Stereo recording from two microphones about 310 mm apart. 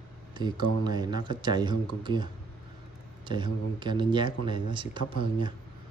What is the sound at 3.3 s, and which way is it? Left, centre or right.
Speech, centre.